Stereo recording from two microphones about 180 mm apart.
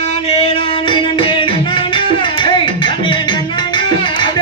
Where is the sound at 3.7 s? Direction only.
25° left (ahead or behind).